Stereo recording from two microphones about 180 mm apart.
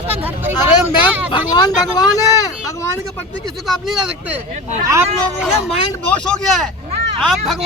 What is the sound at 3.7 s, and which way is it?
Speech, centre (ahead or behind).